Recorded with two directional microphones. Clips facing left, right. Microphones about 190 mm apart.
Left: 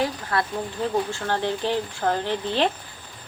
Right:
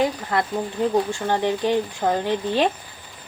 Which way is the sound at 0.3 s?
20° right (ahead or behind).